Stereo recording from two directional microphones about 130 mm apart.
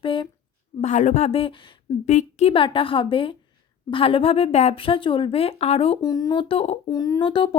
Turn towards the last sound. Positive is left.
turn(degrees=40)  # may be behind; listen again after turning